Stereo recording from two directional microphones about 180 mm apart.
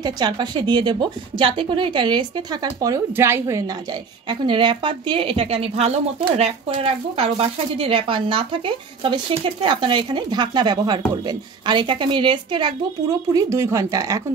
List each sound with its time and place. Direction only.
0.0 s a woman's voice: 25° right (ahead or behind)
4.3 s a woman's voice: 25° right (ahead or behind)